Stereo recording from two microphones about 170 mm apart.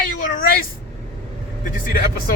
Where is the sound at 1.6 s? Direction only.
55° left (ahead or behind).